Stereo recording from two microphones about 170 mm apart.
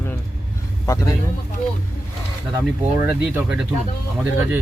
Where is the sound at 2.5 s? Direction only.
15° right (ahead or behind).